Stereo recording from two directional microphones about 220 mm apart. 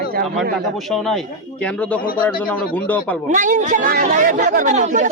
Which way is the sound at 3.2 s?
35° right (ahead or behind).